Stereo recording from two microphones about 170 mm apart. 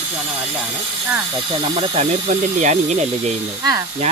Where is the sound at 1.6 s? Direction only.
35° right (ahead or behind).